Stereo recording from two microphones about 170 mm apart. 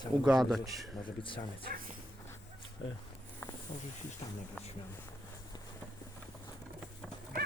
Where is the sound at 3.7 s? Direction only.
30° left (ahead or behind).